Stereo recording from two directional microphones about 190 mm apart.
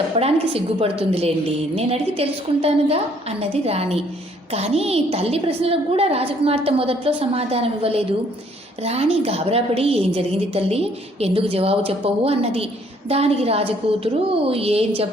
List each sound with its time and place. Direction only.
0.2 s a woman's voice: 30° right (ahead or behind)